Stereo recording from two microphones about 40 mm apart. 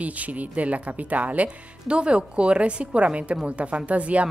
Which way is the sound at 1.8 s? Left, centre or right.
Right.